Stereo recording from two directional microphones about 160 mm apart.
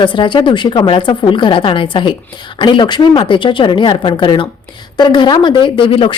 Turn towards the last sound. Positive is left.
turn(degrees=35)  # may be behind; listen again after turning